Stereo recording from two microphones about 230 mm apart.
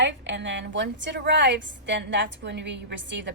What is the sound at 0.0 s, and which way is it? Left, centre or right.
A woman's voice, right.